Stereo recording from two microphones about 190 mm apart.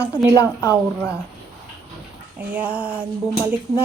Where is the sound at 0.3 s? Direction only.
15° left (ahead or behind).